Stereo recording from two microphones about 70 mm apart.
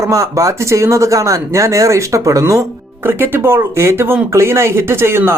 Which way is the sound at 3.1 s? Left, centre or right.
Right.